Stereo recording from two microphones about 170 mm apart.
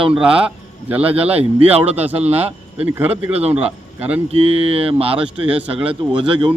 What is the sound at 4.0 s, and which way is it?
Speech, 10° right (ahead or behind).